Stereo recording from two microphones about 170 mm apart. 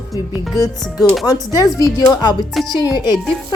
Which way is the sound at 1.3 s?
20° left (ahead or behind).